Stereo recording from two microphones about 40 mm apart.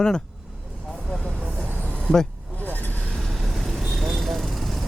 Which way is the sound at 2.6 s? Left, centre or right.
Left.